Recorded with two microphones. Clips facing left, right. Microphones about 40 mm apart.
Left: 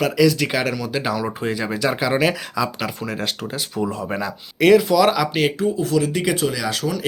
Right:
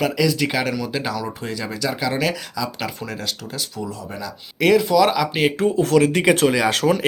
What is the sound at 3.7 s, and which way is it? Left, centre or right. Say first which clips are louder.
Speech: left 6 dB; left.